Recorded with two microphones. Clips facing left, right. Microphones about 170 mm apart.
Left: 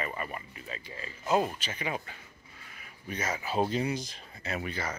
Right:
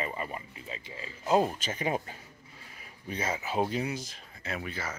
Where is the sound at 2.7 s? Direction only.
30° right (ahead or behind).